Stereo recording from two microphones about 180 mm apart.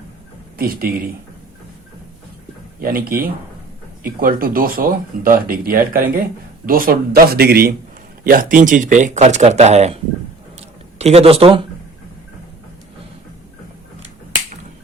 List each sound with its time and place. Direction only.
0.6 s speech: 55° right (ahead or behind)
2.8 s a man's voice: 55° right (ahead or behind); by 11.6 s 30° right (ahead or behind)